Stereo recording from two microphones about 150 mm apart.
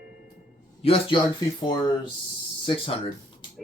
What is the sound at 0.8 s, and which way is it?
Speech, 40° left (ahead or behind).